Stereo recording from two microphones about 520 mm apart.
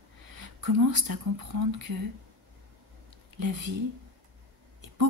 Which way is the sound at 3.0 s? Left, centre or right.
Right.